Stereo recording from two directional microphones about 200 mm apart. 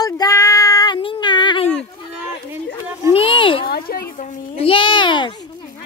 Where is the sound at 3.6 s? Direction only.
50° left (ahead or behind); by 5.3 s 25° left (ahead or behind).